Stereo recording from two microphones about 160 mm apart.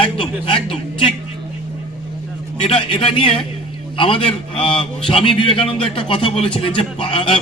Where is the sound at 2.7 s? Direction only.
35° left (ahead or behind).